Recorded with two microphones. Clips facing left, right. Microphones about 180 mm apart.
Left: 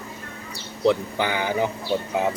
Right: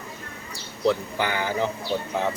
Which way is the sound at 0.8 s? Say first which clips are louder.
Left 2 dB; 15° left (ahead or behind).